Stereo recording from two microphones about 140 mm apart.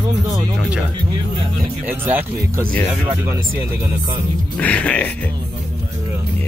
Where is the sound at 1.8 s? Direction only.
15° right (ahead or behind).